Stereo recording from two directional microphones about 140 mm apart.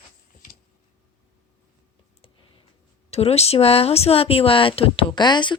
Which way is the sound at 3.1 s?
50° left (ahead or behind).